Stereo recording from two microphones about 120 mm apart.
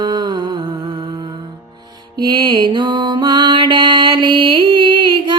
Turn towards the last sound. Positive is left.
turn(degrees=-40)  # may be behind; listen again after turning